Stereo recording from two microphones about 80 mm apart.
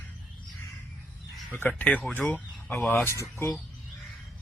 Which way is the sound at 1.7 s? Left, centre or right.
Centre.